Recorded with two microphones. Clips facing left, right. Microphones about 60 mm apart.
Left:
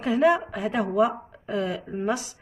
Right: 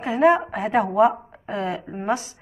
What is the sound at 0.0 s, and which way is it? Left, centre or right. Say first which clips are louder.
Speech: right 3 dB; right.